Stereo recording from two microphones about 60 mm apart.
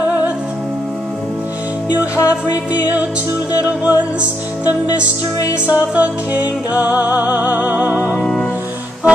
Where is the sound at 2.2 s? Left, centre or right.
Left.